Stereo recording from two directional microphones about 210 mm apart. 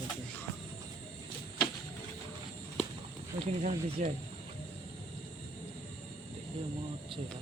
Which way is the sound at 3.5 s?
35° right (ahead or behind).